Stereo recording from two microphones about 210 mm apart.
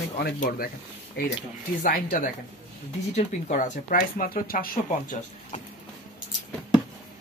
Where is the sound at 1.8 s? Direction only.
45° left (ahead or behind).